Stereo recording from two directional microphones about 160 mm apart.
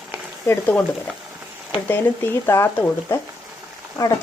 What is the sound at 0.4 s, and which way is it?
Speech, 15° left (ahead or behind).